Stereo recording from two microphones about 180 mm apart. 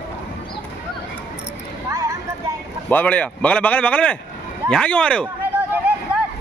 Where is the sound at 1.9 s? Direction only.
15° right (ahead or behind).